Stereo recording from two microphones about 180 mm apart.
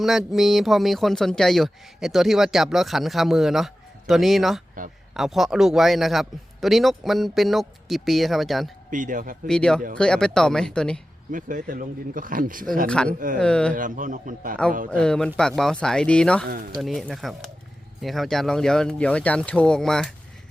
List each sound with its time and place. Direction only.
0.0 s speech: centre (ahead or behind)
8.9 s speech: 45° right (ahead or behind)
9.5 s speech: 5° left (ahead or behind)
11.3 s speech: 50° right (ahead or behind)
12.9 s speech: 5° left (ahead or behind)
13.1 s speech: 50° right (ahead or behind)
13.4 s speech: 5° left (ahead or behind)
13.7 s speech: 45° right (ahead or behind)
14.8 s speech: 5° left (ahead or behind)
16.5 s speech: 50° right (ahead or behind)
16.8 s speech: centre (ahead or behind)